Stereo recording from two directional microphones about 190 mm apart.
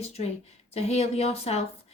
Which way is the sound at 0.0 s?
35° left (ahead or behind).